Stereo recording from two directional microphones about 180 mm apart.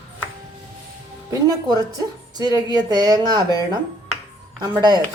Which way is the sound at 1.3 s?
20° right (ahead or behind).